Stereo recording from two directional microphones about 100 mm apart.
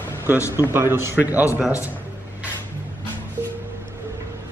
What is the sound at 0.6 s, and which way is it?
Speech, 20° right (ahead or behind).